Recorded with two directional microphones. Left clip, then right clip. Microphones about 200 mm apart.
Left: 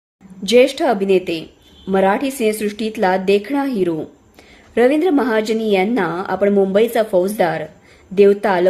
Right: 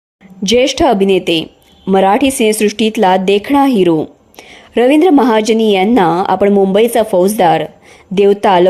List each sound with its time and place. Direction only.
0.4 s a woman's voice: 35° right (ahead or behind)